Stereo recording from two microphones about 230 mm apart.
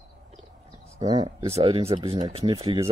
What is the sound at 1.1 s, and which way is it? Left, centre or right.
Speech, right.